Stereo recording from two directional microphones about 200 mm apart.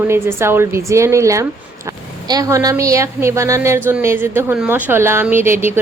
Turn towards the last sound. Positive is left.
turn(degrees=-10)  # may be behind; listen again after turning